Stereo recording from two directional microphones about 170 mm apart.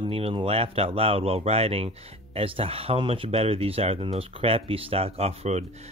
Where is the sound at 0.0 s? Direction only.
35° right (ahead or behind).